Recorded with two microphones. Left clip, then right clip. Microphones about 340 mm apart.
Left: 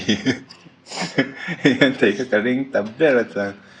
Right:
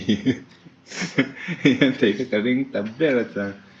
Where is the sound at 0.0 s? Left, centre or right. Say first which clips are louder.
Left 2 dB; centre.